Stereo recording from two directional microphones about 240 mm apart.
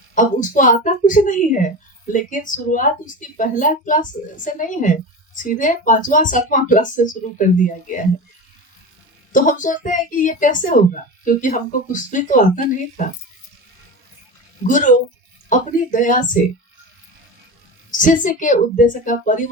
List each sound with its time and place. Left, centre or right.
0.1 s speech: left
9.3 s speech: left
15.4 s speech: left
17.9 s speech: left